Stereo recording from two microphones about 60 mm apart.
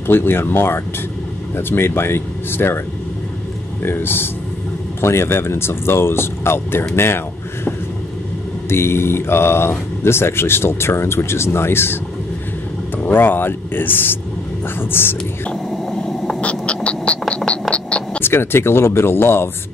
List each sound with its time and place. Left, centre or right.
0.0 s speech: left
3.8 s speech: left
13.0 s speech: left
15.9 s a sound: centre
16.3 s a sound: left
18.2 s speech: left